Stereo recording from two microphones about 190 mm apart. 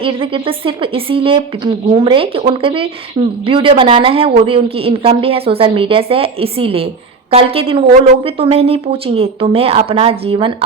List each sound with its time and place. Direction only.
0.0 s a woman's voice: 30° right (ahead or behind)